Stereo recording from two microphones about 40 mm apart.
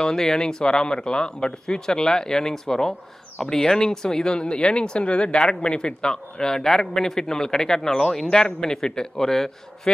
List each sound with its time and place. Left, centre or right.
0.0 s speech: centre